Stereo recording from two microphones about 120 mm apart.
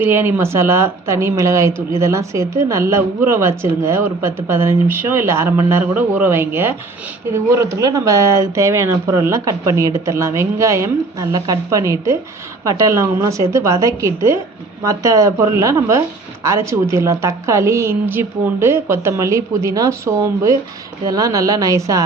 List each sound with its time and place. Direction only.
0.0 s speech: 20° right (ahead or behind)